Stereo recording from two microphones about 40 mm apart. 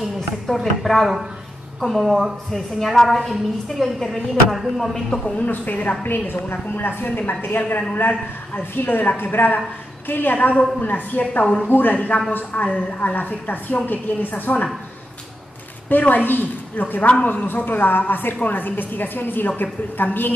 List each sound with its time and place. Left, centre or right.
0.5 s a woman's voice: centre
5.4 s a woman's voice: left
6.0 s a woman's voice: left
10.8 s a woman's voice: left
15.9 s a woman's voice: left
17.6 s a woman's voice: left